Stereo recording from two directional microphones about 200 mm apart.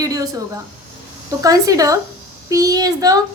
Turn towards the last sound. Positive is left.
turn(degrees=-20)  # may be behind; listen again after turning